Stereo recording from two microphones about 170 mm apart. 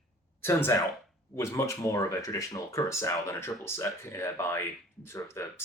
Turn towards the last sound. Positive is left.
turn(degrees=15)  # may be behind; listen again after turning